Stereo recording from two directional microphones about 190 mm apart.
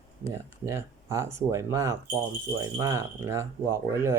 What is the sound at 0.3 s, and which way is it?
Speech, 15° right (ahead or behind).